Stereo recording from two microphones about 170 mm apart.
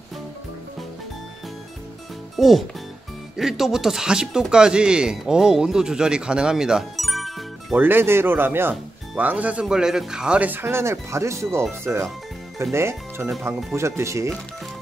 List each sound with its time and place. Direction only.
2.3 s speech: centre (ahead or behind)
7.7 s speech: 10° right (ahead or behind)